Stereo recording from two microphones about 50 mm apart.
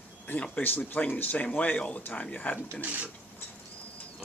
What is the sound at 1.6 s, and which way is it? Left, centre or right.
Speech, left.